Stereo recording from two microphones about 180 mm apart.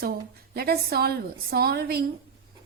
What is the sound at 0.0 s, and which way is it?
A woman's voice, 60° right (ahead or behind).